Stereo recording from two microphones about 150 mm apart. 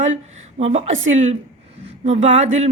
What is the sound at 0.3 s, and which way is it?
A woman's voice, 45° right (ahead or behind).